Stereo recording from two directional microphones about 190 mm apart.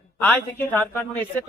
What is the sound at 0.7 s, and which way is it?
Speech, 10° left (ahead or behind).